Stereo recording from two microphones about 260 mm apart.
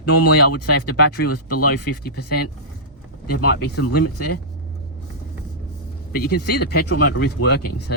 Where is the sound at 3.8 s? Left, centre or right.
Left.